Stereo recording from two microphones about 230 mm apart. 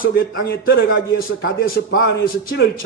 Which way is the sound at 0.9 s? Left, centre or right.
Left.